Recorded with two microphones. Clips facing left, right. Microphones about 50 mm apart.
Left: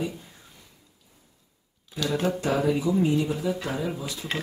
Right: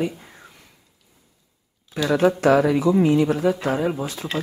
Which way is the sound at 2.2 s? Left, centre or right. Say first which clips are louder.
Right 8 dB; right.